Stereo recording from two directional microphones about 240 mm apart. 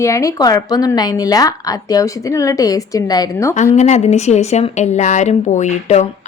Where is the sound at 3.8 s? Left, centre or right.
Left.